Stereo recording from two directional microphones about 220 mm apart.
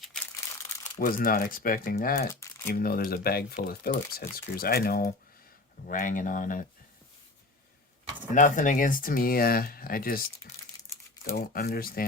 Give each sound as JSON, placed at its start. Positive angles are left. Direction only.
{"t": 0.0, "sound": "crumpling", "side_deg": 5}
{"t": 0.9, "sound": "speech", "side_deg": 40}
{"t": 8.4, "sound": "speech", "side_deg": 35}
{"t": 11.3, "sound": "speech", "side_deg": 45}